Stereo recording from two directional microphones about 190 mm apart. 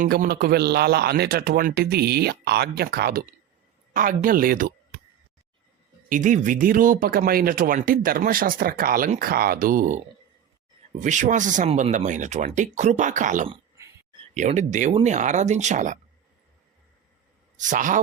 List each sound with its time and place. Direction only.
0.0 s a man's voice: 50° right (ahead or behind)
6.1 s speech: 45° right (ahead or behind)
11.0 s speech: 40° right (ahead or behind)
13.8 s a sound: 15° right (ahead or behind)
14.3 s speech: 40° right (ahead or behind)
17.6 s speech: 45° right (ahead or behind)